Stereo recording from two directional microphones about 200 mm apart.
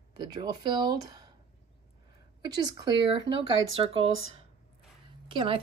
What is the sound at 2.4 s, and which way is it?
Speech, 20° right (ahead or behind).